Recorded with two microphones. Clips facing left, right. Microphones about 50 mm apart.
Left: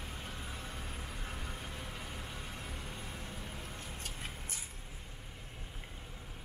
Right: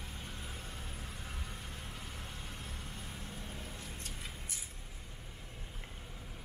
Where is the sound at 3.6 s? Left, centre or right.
Left.